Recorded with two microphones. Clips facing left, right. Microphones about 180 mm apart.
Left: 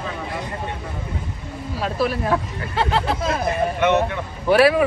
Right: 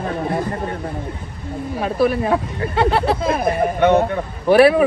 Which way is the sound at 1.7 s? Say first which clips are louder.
Right 5 dB; 20° right (ahead or behind).